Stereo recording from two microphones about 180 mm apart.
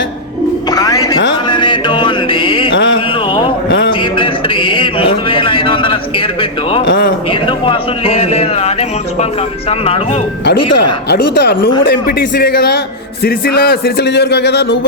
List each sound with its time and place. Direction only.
0.7 s music: 20° left (ahead or behind)
4.2 s a sound: 30° left (ahead or behind)
6.8 s a man's voice: 80° left
7.3 s a man's voice: 30° left (ahead or behind)
11.1 s speech: 65° left (ahead or behind)